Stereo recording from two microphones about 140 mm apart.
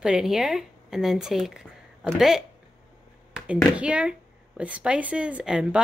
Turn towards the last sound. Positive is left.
turn(degrees=-5)  # may be behind; listen again after turning